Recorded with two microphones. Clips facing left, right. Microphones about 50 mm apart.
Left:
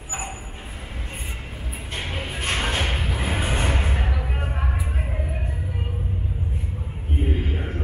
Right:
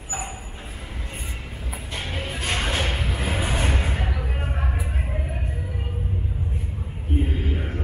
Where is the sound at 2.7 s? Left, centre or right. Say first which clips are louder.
Even; centre.